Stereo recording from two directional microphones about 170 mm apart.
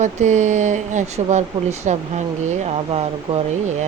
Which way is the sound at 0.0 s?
45° right (ahead or behind).